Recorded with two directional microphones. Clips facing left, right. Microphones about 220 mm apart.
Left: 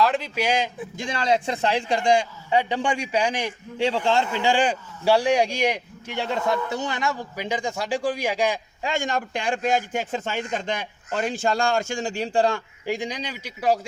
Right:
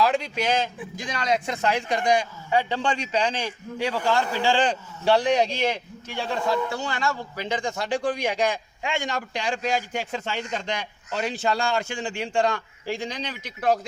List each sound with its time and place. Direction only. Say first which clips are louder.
0.0 s speech: left 1 dB; centre (ahead or behind)
0.9 s speech: left 3 dB; 25° left (ahead or behind); by 8.5 s 5° left (ahead or behind)
8.8 s a man's voice: left 3 dB; 45° left (ahead or behind)
12.8 s speech: left 2 dB; 15° left (ahead or behind)